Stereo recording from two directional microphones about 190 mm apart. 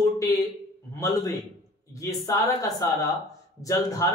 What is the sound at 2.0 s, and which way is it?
Speech, 15° left (ahead or behind).